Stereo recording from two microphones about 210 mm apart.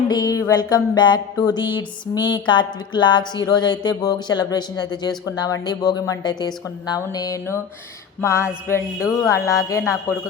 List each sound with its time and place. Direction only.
0.1 s music: 15° left (ahead or behind)
5.6 s speech: 20° left (ahead or behind)